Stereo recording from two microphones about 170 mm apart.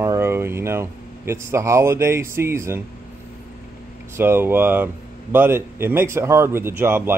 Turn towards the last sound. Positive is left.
turn(degrees=-15)  # may be behind; listen again after turning